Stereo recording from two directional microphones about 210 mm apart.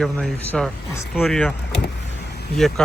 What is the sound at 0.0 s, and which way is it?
Speech, 5° left (ahead or behind).